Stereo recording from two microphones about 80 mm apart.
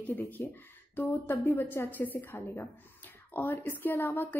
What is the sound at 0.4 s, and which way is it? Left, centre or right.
Speech, left.